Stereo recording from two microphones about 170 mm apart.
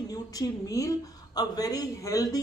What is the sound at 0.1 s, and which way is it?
A woman's voice, 20° left (ahead or behind).